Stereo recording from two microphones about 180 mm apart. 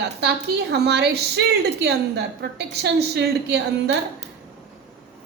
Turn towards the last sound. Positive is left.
turn(degrees=-70)  # may be behind; listen again after turning